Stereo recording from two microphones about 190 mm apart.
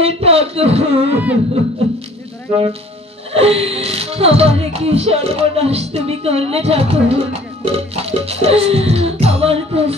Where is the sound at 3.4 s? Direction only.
30° right (ahead or behind).